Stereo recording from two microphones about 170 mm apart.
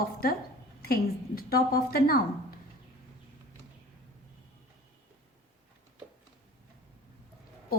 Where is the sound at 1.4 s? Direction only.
65° left (ahead or behind).